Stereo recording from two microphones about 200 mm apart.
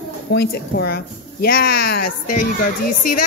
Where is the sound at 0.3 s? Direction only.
55° left (ahead or behind).